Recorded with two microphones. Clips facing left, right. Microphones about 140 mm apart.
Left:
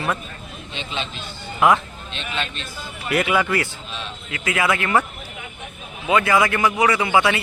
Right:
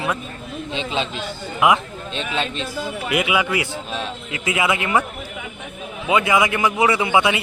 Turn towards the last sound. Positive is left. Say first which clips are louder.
# right 1 dB
turn(degrees=-20)  # may be behind; listen again after turning